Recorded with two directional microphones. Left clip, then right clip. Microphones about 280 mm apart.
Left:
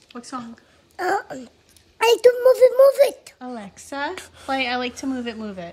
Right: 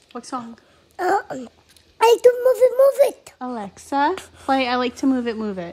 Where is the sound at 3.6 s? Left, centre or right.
Right.